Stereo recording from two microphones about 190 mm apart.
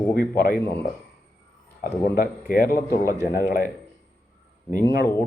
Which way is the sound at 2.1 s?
50° left (ahead or behind).